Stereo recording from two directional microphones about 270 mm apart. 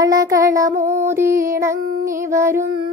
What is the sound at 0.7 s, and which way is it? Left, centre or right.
Female singing, right.